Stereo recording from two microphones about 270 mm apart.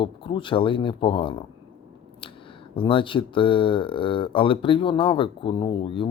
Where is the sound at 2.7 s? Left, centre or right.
Centre.